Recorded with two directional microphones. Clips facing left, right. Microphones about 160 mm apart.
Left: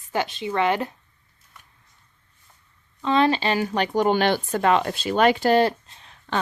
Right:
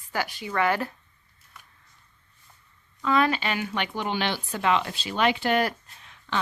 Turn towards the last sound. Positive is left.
turn(degrees=35)  # may be behind; listen again after turning